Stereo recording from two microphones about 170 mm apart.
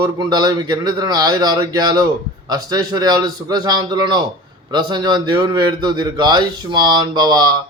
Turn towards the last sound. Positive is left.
turn(degrees=-25)  # may be behind; listen again after turning